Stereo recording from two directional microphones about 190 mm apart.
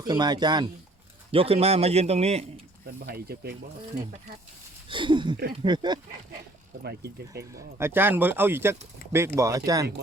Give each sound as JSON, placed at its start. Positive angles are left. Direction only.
{"t": 0.0, "sound": "a man's voice", "side_deg": -20}
{"t": 2.8, "sound": "speech", "side_deg": -55}
{"t": 4.9, "sound": "speech", "side_deg": -25}
{"t": 6.8, "sound": "speech", "side_deg": -60}
{"t": 7.5, "sound": "speech", "side_deg": -15}